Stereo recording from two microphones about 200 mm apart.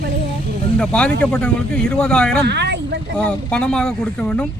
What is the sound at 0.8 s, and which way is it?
Speech, 5° left (ahead or behind).